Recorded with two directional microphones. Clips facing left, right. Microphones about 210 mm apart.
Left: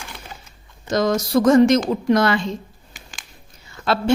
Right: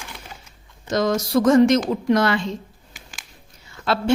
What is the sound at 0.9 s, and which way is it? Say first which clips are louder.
A woman's voice: left 1 dB; 40° left (ahead or behind).